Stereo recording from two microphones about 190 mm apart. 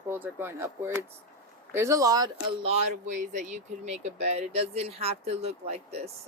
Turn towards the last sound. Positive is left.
turn(degrees=-35)  # may be behind; listen again after turning